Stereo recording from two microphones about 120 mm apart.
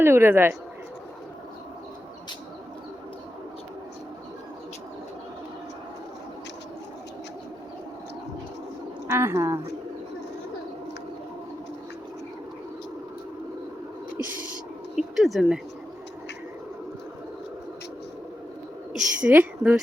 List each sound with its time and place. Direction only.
0.0 s a woman's voice: 20° right (ahead or behind)
9.0 s a woman's voice: 20° right (ahead or behind)
14.2 s a sound: 15° right (ahead or behind)
14.9 s speech: centre (ahead or behind)
18.9 s a woman's voice: 10° right (ahead or behind)